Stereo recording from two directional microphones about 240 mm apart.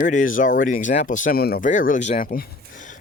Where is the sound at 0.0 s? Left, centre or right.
Left.